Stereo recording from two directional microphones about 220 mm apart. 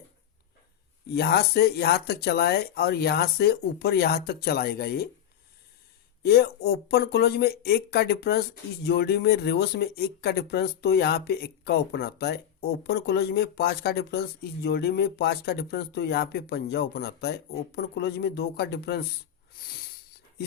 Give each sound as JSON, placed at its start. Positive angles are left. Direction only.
{"t": 1.1, "sound": "speech", "side_deg": 45}
{"t": 6.2, "sound": "speech", "side_deg": 45}
{"t": 19.5, "sound": "a sound", "side_deg": 45}